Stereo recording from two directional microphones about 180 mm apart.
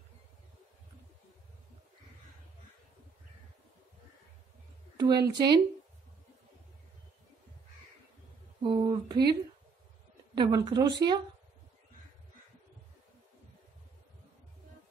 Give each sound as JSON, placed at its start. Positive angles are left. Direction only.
{"t": 4.9, "sound": "a woman's voice", "side_deg": -25}
{"t": 8.6, "sound": "a sound", "side_deg": -25}
{"t": 10.3, "sound": "speech", "side_deg": -25}